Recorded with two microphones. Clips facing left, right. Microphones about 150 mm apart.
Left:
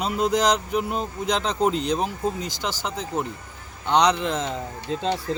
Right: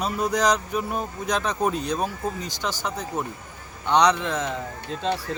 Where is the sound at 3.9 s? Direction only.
25° left (ahead or behind).